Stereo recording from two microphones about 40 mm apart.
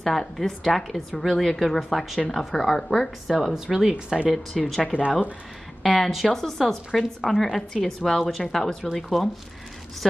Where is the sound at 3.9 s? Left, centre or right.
Right.